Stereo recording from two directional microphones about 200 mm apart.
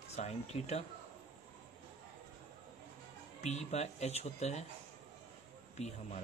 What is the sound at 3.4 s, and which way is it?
Speech, 35° left (ahead or behind).